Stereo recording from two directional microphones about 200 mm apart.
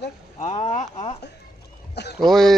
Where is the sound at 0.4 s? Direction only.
35° left (ahead or behind).